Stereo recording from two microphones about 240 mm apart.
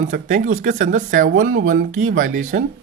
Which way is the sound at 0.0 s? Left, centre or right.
Right.